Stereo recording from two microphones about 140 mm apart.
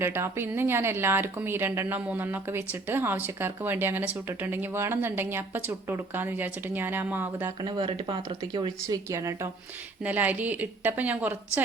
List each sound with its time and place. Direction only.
0.0 s speech: 15° right (ahead or behind)
7.6 s speech: 35° right (ahead or behind)
9.0 s speech: 20° right (ahead or behind)